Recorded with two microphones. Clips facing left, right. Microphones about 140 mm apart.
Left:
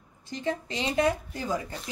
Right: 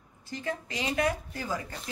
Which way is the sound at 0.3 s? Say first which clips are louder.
Left 4 dB; 25° left (ahead or behind).